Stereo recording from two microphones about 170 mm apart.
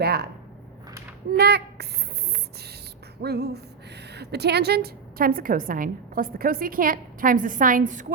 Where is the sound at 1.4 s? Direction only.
70° right (ahead or behind).